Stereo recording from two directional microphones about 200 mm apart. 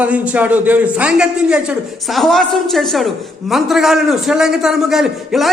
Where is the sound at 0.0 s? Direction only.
5° right (ahead or behind).